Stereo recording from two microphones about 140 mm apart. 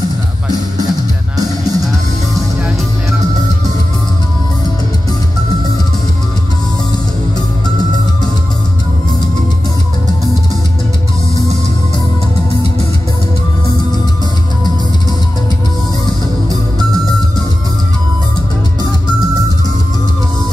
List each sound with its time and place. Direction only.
1.3 s music: 25° right (ahead or behind)